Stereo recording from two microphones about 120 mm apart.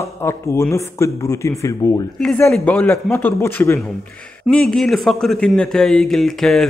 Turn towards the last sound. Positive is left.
turn(degrees=0)  # may be behind; listen again after turning